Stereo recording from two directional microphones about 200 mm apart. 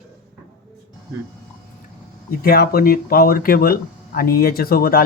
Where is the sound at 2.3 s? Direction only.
50° left (ahead or behind).